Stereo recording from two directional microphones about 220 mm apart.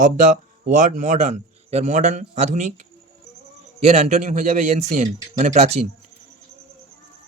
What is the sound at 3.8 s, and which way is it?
Speech, 30° right (ahead or behind).